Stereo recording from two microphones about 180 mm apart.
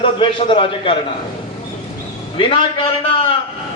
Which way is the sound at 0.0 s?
25° left (ahead or behind).